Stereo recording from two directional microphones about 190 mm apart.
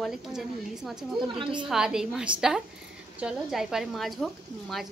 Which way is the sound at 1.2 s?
25° right (ahead or behind).